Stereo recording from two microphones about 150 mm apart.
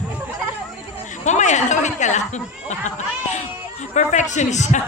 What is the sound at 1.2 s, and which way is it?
Speech, 50° left (ahead or behind).